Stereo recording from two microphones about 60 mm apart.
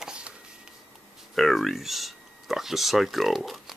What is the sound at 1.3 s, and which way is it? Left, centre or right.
Speech, centre.